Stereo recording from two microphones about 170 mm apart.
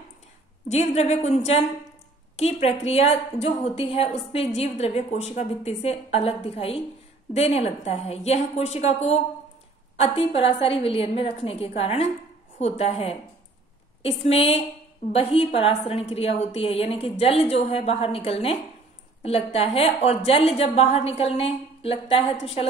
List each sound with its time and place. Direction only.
0.7 s a woman's voice: 40° left (ahead or behind)